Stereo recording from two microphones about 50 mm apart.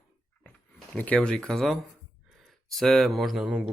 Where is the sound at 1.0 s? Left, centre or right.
Left.